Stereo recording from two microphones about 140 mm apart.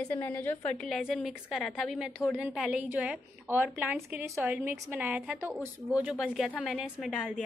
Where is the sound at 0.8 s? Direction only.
Centre (ahead or behind).